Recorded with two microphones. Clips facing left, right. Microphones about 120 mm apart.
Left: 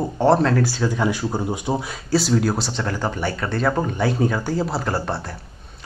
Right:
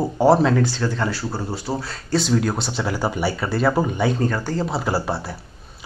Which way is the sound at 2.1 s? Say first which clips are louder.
Left 1 dB; 5° left (ahead or behind).